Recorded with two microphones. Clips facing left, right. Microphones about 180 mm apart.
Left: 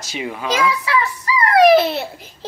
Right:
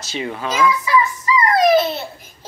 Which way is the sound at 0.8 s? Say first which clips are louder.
Right 2 dB; 65° left (ahead or behind).